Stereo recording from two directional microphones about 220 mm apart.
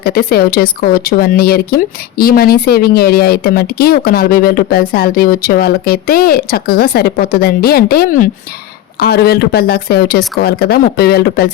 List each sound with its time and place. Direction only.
0.0 s speech: 45° left (ahead or behind)